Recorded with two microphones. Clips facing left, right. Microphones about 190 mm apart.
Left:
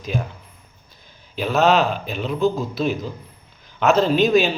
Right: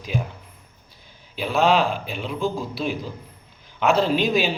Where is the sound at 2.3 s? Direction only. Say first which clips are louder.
Left 6 dB; 10° right (ahead or behind).